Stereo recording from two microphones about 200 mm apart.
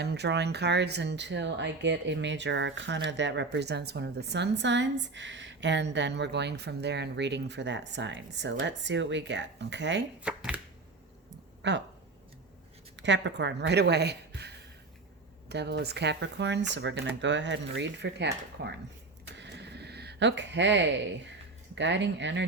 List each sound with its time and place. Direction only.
0.0 s a woman's voice: 55° right (ahead or behind)
10.2 s speech: 5° right (ahead or behind)
11.6 s a woman's voice: 60° right (ahead or behind)
13.0 s a woman's voice: 60° right (ahead or behind)
19.4 s a sound: 60° right (ahead or behind)
21.8 s a woman's voice: 60° right (ahead or behind)